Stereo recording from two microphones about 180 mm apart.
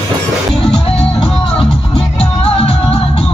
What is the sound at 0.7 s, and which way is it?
Music, 30° left (ahead or behind).